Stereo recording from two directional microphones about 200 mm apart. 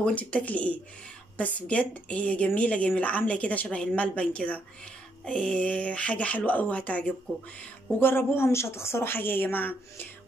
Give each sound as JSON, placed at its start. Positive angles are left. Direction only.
{"t": 0.0, "sound": "a woman's voice", "side_deg": 5}